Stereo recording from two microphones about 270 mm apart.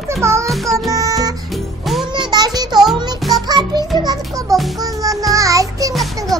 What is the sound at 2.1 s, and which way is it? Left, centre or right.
Child singing, centre.